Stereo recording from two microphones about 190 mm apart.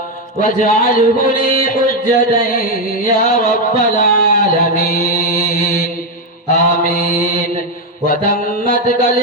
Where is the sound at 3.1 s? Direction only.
50° left (ahead or behind).